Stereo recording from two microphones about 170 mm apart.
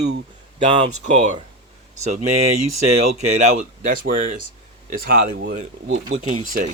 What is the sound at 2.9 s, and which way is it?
Speech, 40° right (ahead or behind).